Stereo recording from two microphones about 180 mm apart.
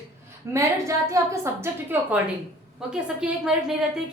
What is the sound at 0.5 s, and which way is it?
A woman's voice, 15° right (ahead or behind).